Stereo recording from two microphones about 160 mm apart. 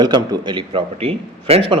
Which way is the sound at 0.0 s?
25° right (ahead or behind).